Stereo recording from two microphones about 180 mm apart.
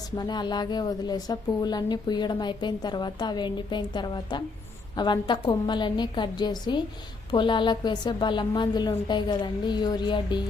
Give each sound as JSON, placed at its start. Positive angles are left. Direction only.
{"t": 0.2, "sound": "a woman's voice", "side_deg": 25}